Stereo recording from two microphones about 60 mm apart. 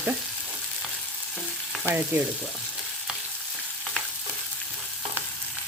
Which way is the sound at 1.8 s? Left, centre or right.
Right.